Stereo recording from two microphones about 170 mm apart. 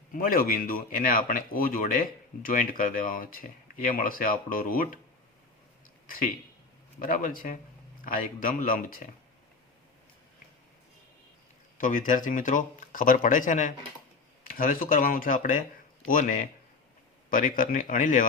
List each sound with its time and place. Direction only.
0.1 s speech: 55° left (ahead or behind)
7.0 s speech: 55° left (ahead or behind)
11.8 s speech: 50° left (ahead or behind)